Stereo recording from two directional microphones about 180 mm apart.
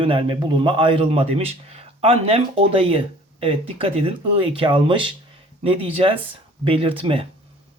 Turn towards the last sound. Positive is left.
turn(degrees=-30)  # may be behind; listen again after turning